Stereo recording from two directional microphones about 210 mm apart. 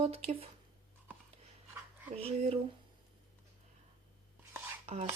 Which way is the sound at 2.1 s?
30° right (ahead or behind).